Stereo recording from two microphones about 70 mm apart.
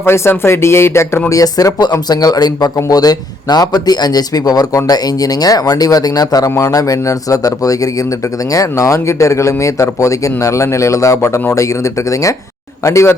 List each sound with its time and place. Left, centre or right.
0.0 s speech: left
1.3 s a man's voice: left